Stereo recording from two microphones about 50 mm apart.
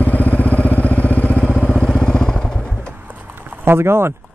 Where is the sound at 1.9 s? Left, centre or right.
Centre.